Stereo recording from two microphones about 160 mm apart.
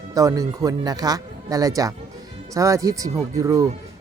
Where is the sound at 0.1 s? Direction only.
20° right (ahead or behind).